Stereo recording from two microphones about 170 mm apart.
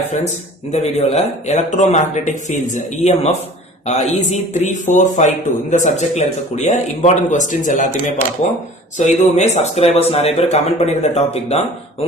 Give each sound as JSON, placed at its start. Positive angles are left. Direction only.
{"t": 0.7, "sound": "speech", "side_deg": 40}